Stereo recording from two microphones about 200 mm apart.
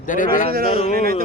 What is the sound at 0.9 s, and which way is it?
Speech, 50° right (ahead or behind).